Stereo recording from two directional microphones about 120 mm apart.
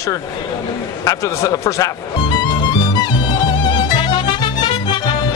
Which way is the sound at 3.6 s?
35° left (ahead or behind).